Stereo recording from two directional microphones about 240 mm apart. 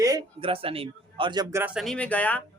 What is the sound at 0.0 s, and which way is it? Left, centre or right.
Speech, centre.